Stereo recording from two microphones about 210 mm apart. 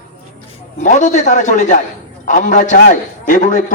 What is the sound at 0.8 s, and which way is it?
A man's voice, 35° left (ahead or behind).